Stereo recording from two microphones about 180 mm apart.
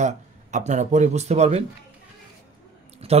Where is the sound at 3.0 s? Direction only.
30° right (ahead or behind).